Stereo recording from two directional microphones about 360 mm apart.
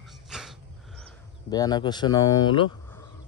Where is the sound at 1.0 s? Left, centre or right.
Centre.